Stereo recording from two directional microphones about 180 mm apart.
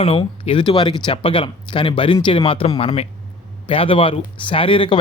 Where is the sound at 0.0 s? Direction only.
30° left (ahead or behind).